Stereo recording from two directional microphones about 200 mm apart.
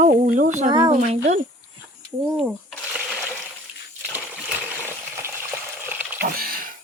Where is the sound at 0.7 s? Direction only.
25° right (ahead or behind).